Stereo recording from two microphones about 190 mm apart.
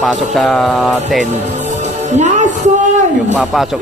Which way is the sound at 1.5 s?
40° right (ahead or behind).